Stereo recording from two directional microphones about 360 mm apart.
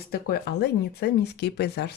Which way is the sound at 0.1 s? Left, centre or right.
Left.